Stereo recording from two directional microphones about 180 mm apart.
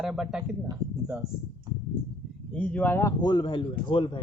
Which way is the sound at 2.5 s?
5° left (ahead or behind).